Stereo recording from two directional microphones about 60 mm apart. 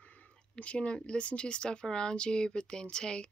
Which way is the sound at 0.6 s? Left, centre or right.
Centre.